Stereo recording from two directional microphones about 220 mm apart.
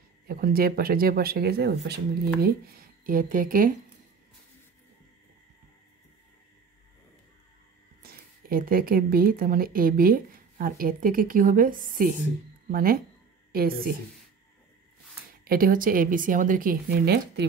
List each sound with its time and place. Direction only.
0.3 s speech: 40° right (ahead or behind)
8.0 s speech: 40° right (ahead or behind)
15.4 s speech: 40° right (ahead or behind)